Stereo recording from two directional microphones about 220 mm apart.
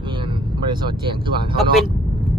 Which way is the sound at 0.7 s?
20° right (ahead or behind).